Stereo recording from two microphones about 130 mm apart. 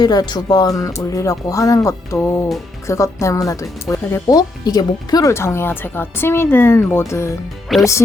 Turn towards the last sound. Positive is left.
turn(degrees=0)  # may be behind; listen again after turning